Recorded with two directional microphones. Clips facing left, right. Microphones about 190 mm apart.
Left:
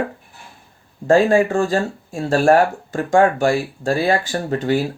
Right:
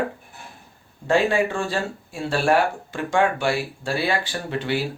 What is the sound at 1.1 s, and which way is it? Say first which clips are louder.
Speech: left 6 dB; 45° left (ahead or behind).